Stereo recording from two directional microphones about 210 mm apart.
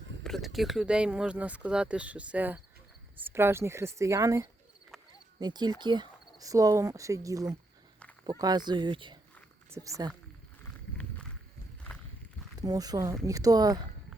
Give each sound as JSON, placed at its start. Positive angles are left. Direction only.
{"t": 0.3, "sound": "speech", "side_deg": 0}
{"t": 12.5, "sound": "speech", "side_deg": -15}